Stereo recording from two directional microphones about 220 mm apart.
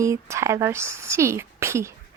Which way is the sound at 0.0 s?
15° right (ahead or behind).